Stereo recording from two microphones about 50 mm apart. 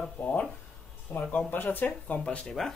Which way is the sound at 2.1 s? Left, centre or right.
Centre.